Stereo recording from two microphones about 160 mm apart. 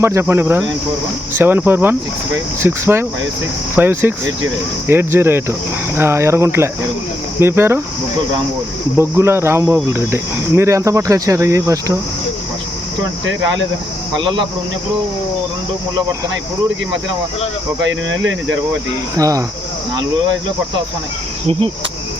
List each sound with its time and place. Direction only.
0.0 s cricket: 15° right (ahead or behind)
9.0 s cricket: 15° right (ahead or behind)
14.2 s speech: 30° right (ahead or behind)
19.1 s speech: 20° right (ahead or behind)